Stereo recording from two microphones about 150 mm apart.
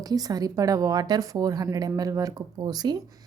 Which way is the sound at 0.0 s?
25° right (ahead or behind).